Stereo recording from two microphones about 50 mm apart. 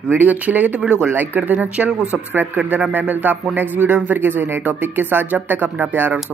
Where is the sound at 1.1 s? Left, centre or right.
Right.